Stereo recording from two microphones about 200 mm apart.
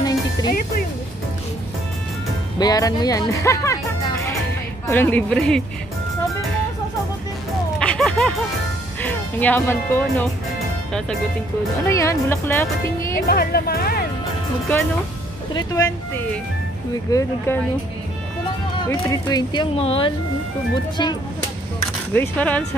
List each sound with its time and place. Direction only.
0.5 s speech: 45° left (ahead or behind)
2.6 s speech: 20° left (ahead or behind)
7.8 s a sound: 5° left (ahead or behind)
9.0 s speech: 10° left (ahead or behind)
11.9 s speech: 15° left (ahead or behind)
13.3 s speech: 50° left (ahead or behind)
15.5 s speech: 15° left (ahead or behind)
17.1 s speech: 15° left (ahead or behind)
18.9 s speech: 20° left (ahead or behind)
22.1 s speech: 10° left (ahead or behind)